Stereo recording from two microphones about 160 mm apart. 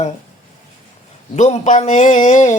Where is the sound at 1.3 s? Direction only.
45° left (ahead or behind).